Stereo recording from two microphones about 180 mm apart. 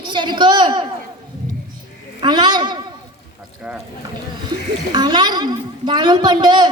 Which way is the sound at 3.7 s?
10° right (ahead or behind).